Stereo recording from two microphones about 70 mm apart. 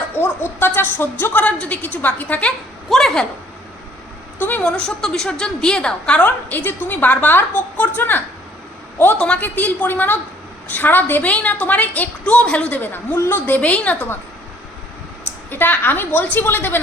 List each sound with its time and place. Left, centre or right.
0.2 s a woman's voice: left
2.9 s speech: centre
4.4 s a woman's voice: left
4.6 s a woman's voice: centre; by 8.2 s left
9.1 s a woman's voice: centre
9.4 s a woman's voice: left
12.8 s a woman's voice: left
13.4 s a woman's voice: centre
15.4 s a woman's voice: left